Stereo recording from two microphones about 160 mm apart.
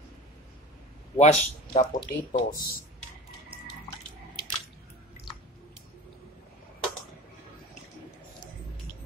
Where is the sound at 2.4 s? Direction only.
60° left (ahead or behind).